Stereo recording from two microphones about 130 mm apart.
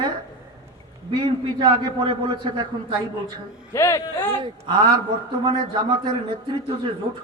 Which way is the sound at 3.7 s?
25° left (ahead or behind).